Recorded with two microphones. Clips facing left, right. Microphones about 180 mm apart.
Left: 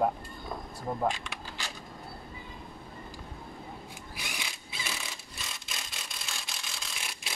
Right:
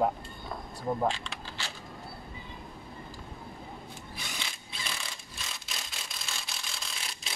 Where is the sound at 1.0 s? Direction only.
15° left (ahead or behind).